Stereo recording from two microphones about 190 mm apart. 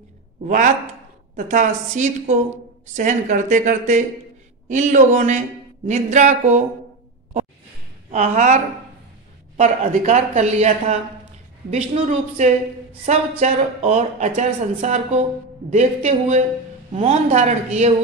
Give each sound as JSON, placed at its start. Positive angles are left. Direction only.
{"t": 0.5, "sound": "speech", "side_deg": -40}
{"t": 8.1, "sound": "speech", "side_deg": -35}
{"t": 9.6, "sound": "speech", "side_deg": -40}